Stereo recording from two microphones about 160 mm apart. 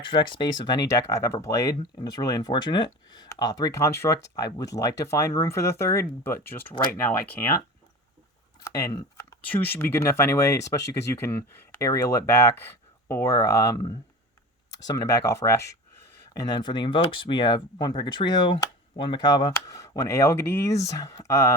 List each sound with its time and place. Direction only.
0.0 s speech: 30° left (ahead or behind); by 7.6 s 15° left (ahead or behind)
8.6 s speech: 20° left (ahead or behind)